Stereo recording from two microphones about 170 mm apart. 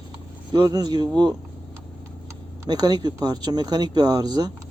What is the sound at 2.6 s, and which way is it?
Speech, 25° right (ahead or behind).